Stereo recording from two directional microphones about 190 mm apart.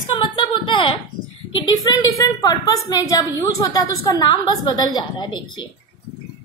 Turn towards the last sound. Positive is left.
turn(degrees=20)  # may be behind; listen again after turning